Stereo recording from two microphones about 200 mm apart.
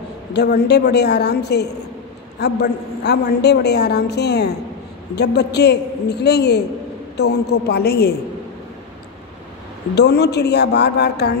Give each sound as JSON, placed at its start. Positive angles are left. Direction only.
{"t": 0.3, "sound": "a woman's voice", "side_deg": 55}
{"t": 9.9, "sound": "a woman's voice", "side_deg": 55}